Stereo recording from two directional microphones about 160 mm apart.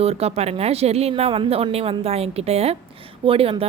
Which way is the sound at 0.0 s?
40° right (ahead or behind).